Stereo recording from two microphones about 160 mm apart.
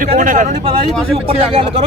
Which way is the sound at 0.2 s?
55° right (ahead or behind).